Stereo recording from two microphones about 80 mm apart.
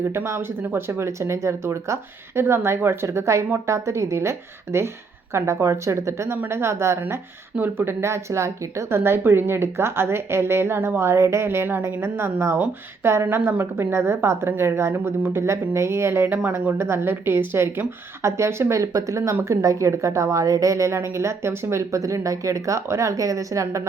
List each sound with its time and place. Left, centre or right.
0.1 s speech: right